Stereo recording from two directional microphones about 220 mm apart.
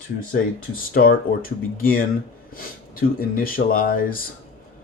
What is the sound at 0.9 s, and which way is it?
Speech, 40° left (ahead or behind).